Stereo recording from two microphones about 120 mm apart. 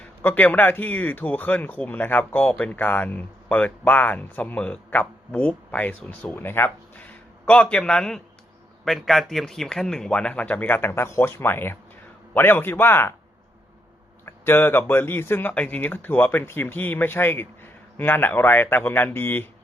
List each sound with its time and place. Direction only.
0.0 s a man's voice: 15° left (ahead or behind)
14.3 s speech: 20° left (ahead or behind)